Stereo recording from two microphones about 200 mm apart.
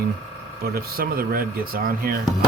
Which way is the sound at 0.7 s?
45° right (ahead or behind).